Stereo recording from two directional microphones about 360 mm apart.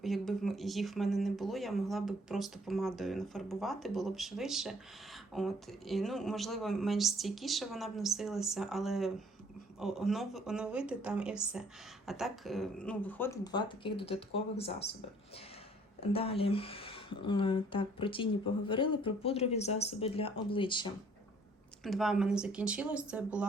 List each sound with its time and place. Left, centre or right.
0.0 s speech: centre
16.1 s speech: centre
21.8 s speech: centre